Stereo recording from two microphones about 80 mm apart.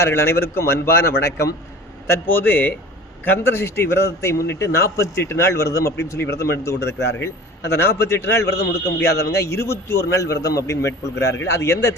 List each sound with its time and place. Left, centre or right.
0.0 s a man's voice: left